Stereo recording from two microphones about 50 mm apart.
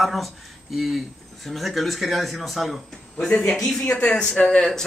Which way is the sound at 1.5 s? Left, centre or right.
Centre.